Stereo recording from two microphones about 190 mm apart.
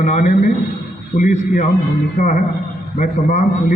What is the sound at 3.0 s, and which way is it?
Speech, 40° left (ahead or behind).